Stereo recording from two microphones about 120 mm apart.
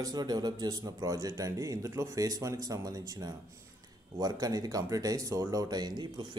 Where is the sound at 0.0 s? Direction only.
35° right (ahead or behind).